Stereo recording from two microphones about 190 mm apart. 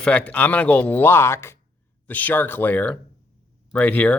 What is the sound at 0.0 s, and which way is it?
Speech, 5° left (ahead or behind).